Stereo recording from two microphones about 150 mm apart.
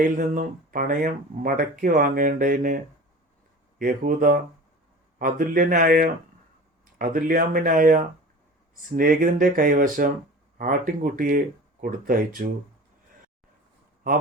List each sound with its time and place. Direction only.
0.0 s speech: 60° right (ahead or behind)